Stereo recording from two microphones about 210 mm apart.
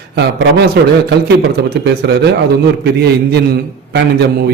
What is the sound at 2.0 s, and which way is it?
A man's voice, 55° right (ahead or behind).